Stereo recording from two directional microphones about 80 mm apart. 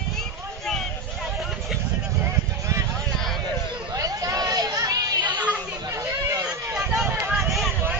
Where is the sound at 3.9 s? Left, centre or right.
Right.